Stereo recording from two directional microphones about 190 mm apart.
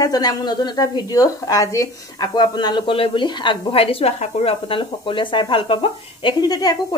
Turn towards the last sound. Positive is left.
turn(degrees=20)  # may be behind; listen again after turning